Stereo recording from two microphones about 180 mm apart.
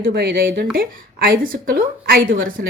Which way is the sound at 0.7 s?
55° right (ahead or behind).